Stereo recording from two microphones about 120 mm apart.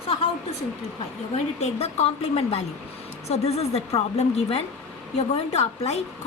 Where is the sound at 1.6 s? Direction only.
60° left (ahead or behind).